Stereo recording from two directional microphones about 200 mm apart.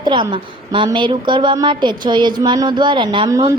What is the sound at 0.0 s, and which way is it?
A woman's voice, 25° right (ahead or behind).